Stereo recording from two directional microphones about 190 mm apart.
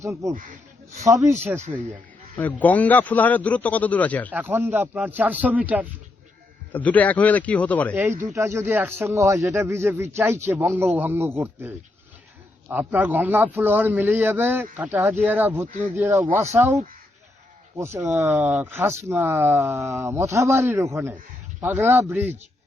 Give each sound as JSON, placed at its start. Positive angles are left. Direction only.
{"t": 0.0, "sound": "speech", "side_deg": -15}
{"t": 2.4, "sound": "speech", "side_deg": 10}
{"t": 4.3, "sound": "speech", "side_deg": -10}
{"t": 6.7, "sound": "speech", "side_deg": 10}
{"t": 7.9, "sound": "speech", "side_deg": -10}